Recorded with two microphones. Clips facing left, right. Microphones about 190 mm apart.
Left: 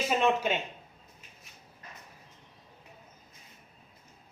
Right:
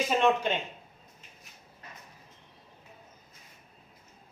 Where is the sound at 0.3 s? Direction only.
5° left (ahead or behind).